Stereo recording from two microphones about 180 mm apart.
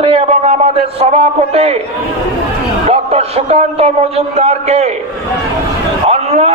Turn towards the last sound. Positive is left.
turn(degrees=-35)  # may be behind; listen again after turning